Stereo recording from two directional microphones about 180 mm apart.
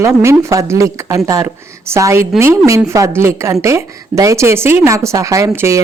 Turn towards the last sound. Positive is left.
turn(degrees=-15)  # may be behind; listen again after turning